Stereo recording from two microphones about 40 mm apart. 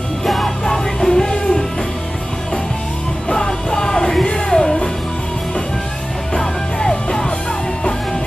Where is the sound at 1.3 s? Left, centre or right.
Left.